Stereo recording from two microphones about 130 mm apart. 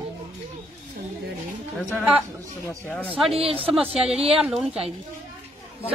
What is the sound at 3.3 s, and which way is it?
Speech, 45° right (ahead or behind).